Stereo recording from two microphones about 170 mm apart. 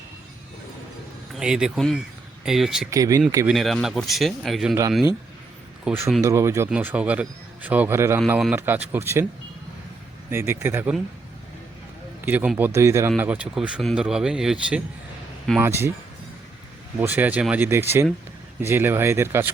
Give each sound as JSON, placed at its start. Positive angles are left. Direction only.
{"t": 1.3, "sound": "speech", "side_deg": -5}
{"t": 2.9, "sound": "speech", "side_deg": -20}
{"t": 3.4, "sound": "speech", "side_deg": 0}
{"t": 5.8, "sound": "speech", "side_deg": -5}
{"t": 6.2, "sound": "speech", "side_deg": -15}
{"t": 10.2, "sound": "speech", "side_deg": -15}
{"t": 12.2, "sound": "speech", "side_deg": -10}
{"t": 15.6, "sound": "speech", "side_deg": -15}
{"t": 17.0, "sound": "speech", "side_deg": -10}